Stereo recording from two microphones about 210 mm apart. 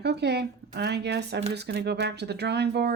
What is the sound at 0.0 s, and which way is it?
Speech, 50° right (ahead or behind).